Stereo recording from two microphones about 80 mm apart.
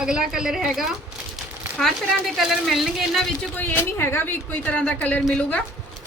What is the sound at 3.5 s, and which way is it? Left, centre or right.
A woman's voice, left.